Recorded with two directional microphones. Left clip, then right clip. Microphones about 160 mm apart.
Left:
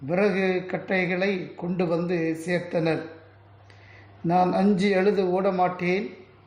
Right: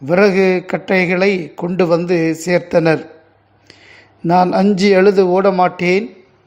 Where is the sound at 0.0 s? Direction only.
40° right (ahead or behind).